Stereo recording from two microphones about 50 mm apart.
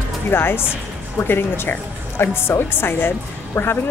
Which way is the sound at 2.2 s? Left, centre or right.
Left.